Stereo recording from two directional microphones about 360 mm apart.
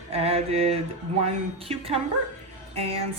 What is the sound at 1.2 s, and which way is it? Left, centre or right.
A woman's voice, centre.